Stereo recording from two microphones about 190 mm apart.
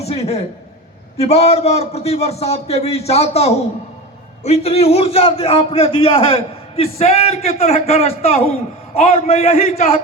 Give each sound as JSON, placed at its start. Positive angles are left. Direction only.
{"t": 0.0, "sound": "a man's voice", "side_deg": 35}